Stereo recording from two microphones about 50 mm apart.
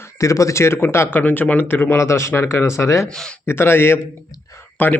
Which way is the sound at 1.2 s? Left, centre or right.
Left.